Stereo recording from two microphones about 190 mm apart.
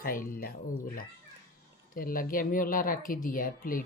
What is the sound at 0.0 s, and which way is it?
Speech, 50° left (ahead or behind).